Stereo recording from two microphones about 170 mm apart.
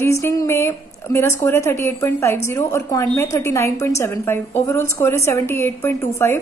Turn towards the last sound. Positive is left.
turn(degrees=15)  # may be behind; listen again after turning